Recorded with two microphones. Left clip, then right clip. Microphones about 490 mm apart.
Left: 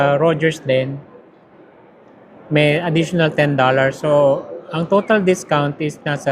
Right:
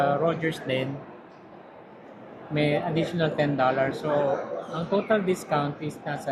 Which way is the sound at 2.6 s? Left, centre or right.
Left.